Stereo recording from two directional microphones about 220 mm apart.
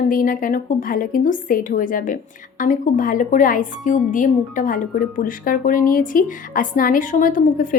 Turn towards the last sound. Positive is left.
turn(degrees=35)  # may be behind; listen again after turning